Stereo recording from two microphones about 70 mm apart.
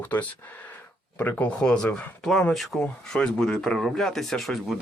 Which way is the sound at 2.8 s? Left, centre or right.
Centre.